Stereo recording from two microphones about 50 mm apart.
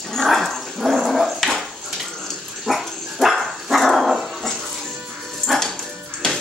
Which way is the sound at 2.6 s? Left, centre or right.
Centre.